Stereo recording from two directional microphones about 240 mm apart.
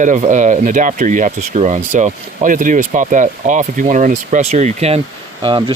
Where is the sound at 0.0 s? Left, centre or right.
Right.